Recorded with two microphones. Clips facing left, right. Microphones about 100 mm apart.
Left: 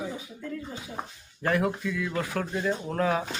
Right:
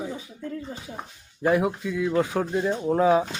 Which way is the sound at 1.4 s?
20° right (ahead or behind).